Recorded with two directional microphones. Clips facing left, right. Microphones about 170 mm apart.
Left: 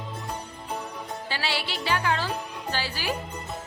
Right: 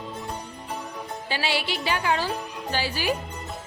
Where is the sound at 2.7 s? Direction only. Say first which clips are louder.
Right 4 dB; 15° right (ahead or behind).